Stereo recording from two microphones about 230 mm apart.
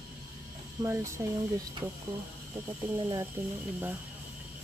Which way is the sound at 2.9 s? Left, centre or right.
Centre.